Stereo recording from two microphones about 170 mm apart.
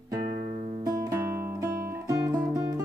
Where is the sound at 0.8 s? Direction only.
20° right (ahead or behind).